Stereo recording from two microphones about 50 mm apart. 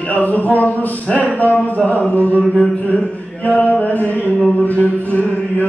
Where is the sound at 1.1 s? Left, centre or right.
Left.